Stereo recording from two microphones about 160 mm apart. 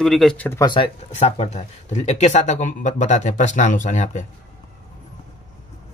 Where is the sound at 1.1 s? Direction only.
45° left (ahead or behind).